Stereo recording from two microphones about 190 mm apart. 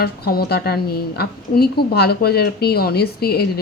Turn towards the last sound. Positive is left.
turn(degrees=55)  # may be behind; listen again after turning